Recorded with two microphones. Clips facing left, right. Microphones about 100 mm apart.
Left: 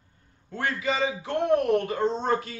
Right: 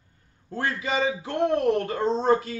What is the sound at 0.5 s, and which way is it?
A man's voice, 30° right (ahead or behind).